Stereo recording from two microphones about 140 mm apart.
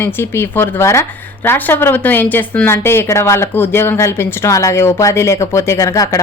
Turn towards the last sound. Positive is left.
turn(degrees=25)  # may be behind; listen again after turning